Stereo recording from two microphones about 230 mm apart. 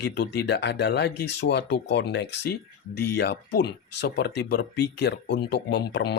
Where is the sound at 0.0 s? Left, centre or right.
Left.